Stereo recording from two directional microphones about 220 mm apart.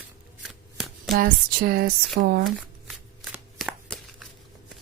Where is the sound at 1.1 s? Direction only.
45° right (ahead or behind).